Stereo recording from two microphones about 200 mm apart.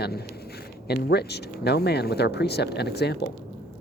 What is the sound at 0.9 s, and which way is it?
Speech, 55° left (ahead or behind).